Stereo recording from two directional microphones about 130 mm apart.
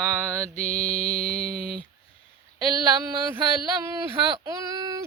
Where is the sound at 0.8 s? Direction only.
55° left (ahead or behind).